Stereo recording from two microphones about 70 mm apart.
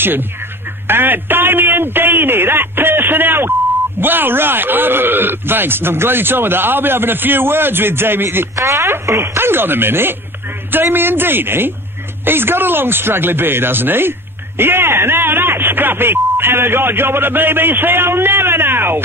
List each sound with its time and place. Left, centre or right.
0.8 s speech: right
8.5 s speech: right